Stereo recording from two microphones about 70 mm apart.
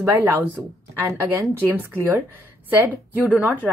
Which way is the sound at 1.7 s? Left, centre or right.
Right.